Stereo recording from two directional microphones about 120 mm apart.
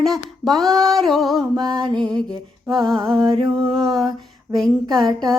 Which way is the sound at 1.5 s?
40° right (ahead or behind).